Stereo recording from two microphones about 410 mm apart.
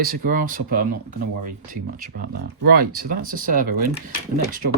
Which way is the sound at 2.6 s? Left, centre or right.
Right.